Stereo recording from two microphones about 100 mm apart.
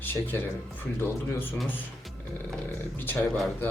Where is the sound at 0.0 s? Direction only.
20° left (ahead or behind).